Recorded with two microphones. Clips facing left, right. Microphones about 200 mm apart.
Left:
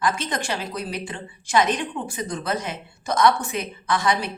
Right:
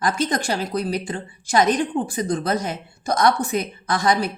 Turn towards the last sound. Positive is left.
turn(degrees=-40)  # may be behind; listen again after turning